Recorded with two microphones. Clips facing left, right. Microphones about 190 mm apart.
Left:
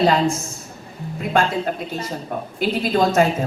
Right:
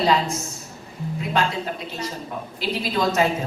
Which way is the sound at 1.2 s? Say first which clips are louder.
Left 4 dB; 50° left (ahead or behind).